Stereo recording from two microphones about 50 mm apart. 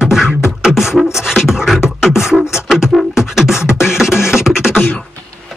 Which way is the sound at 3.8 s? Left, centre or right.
Centre.